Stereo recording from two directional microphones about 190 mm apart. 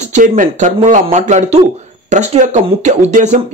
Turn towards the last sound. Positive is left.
turn(degrees=-40)  # may be behind; listen again after turning